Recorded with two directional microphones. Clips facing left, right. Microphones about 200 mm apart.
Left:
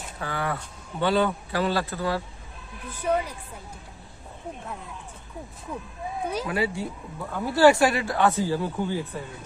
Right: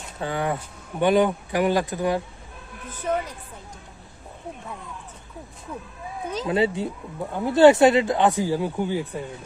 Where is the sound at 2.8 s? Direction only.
10° left (ahead or behind).